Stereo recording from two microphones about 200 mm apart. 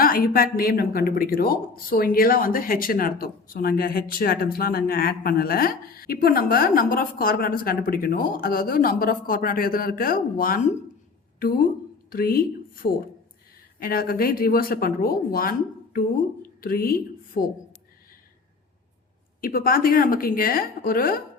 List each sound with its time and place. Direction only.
0.0 s a woman's voice: 45° left (ahead or behind)
19.4 s speech: 45° left (ahead or behind)